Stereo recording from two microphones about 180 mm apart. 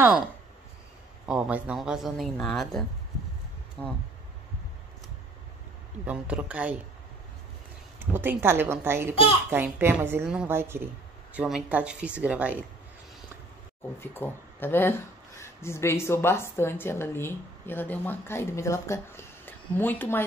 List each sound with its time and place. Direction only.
1.2 s speech: 5° right (ahead or behind)
6.0 s a woman's voice: 10° right (ahead or behind)
8.0 s a woman's voice: 10° right (ahead or behind)
9.1 s a child's voice: 30° left (ahead or behind)
9.5 s a woman's voice: 10° right (ahead or behind)
13.9 s speech: 10° left (ahead or behind)